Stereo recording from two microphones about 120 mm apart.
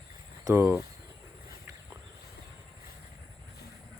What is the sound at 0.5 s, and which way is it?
Speech, 20° right (ahead or behind).